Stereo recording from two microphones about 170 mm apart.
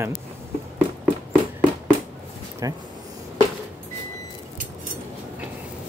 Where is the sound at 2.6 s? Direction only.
20° right (ahead or behind).